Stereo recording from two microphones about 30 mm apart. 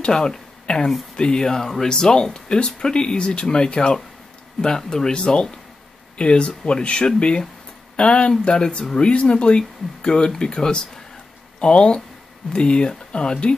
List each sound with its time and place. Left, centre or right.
0.0 s speech: left